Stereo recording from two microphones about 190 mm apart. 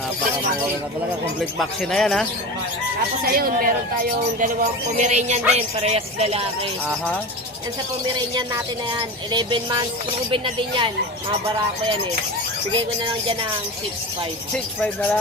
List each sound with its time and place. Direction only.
1.4 s speech: centre (ahead or behind)
3.2 s speech: 50° right (ahead or behind); by 6.4 s 35° right (ahead or behind)
8.4 s speech: 20° right (ahead or behind)
12.7 s speech: 30° right (ahead or behind)